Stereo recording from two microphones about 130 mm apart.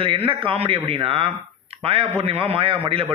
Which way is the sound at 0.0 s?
45° right (ahead or behind).